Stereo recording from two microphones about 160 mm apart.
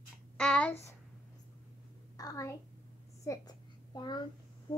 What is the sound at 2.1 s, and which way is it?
Speech, 20° left (ahead or behind).